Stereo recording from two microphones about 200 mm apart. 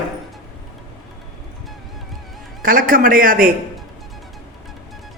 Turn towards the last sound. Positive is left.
turn(degrees=-45)  # may be behind; listen again after turning